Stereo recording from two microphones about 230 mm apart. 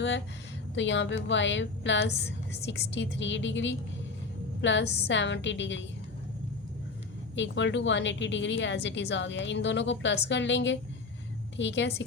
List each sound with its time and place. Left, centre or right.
0.8 s a woman's voice: left
7.3 s a woman's voice: left